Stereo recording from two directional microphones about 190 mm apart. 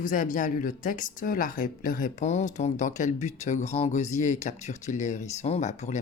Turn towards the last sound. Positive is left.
turn(degrees=40)  # may be behind; listen again after turning